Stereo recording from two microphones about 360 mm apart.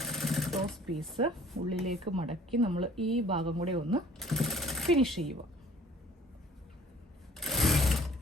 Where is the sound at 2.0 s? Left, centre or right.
Centre.